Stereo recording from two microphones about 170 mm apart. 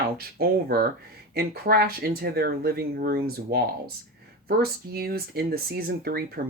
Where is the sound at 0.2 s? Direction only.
65° right (ahead or behind).